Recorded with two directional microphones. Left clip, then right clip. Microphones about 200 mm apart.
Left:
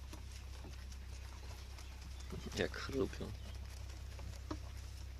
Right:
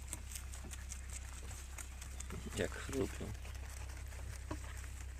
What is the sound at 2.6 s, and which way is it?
Speech, 5° left (ahead or behind).